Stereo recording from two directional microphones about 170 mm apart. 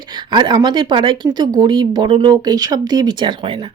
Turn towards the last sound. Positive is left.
turn(degrees=-30)  # may be behind; listen again after turning